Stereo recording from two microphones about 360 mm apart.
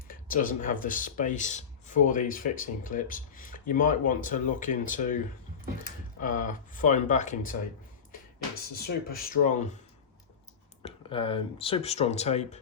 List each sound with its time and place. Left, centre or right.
0.1 s speech: left
8.7 s speech: left
10.8 s speech: centre